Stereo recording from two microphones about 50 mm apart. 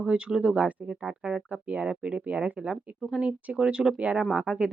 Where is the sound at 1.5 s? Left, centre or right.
Right.